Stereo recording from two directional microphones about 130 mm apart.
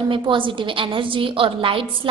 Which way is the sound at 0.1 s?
40° right (ahead or behind).